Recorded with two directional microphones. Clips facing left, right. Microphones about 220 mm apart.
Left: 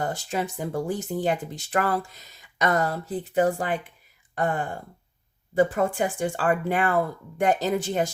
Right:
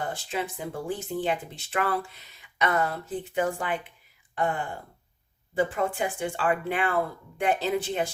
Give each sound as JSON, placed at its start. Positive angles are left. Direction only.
{"t": 0.0, "sound": "speech", "side_deg": 40}
{"t": 5.5, "sound": "speech", "side_deg": 40}